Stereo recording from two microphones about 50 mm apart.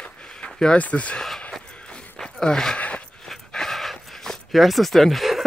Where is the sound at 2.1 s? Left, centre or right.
Centre.